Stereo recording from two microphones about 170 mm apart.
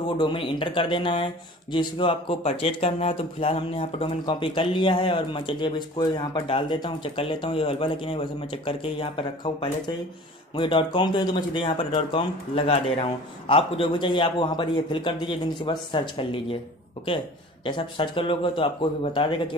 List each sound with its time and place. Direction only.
0.2 s speech: 30° left (ahead or behind)
17.6 s speech: 30° left (ahead or behind)